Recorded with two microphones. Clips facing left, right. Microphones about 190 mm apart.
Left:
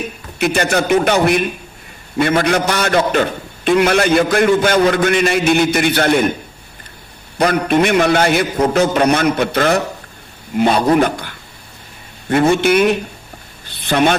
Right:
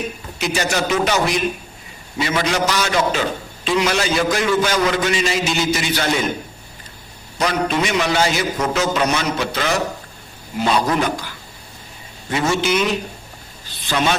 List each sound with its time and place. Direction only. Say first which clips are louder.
0.3 s a man's voice: left 5 dB; 55° left (ahead or behind)
7.3 s a man's voice: left 6 dB; 55° left (ahead or behind)